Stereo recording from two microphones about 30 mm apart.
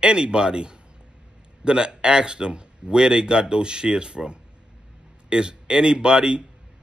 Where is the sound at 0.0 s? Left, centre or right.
Right.